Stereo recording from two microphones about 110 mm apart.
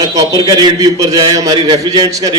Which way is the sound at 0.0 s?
35° right (ahead or behind).